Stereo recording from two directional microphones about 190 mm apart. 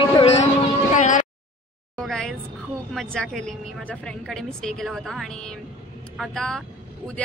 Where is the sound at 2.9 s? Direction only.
5° left (ahead or behind).